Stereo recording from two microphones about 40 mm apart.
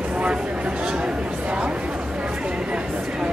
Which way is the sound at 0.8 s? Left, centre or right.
Right.